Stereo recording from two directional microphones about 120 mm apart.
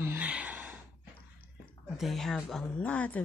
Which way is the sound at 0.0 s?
15° right (ahead or behind).